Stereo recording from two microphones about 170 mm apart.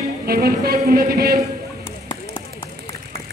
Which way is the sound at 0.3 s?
65° right (ahead or behind).